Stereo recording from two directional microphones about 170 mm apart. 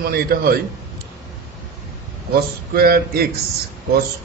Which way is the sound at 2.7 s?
65° right (ahead or behind).